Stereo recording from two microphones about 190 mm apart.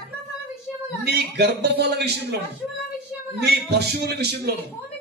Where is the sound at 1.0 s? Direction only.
60° right (ahead or behind).